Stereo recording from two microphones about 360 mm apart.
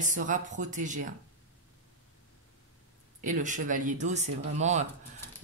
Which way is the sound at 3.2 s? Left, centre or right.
Right.